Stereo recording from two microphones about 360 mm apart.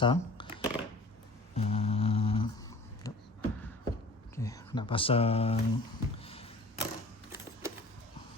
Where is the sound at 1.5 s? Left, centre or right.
Centre.